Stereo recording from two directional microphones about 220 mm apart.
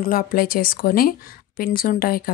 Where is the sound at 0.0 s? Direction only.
40° left (ahead or behind).